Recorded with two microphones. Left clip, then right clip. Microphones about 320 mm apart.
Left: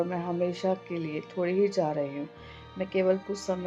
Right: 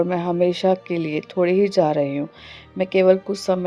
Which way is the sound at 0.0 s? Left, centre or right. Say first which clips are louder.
Right 10 dB; right.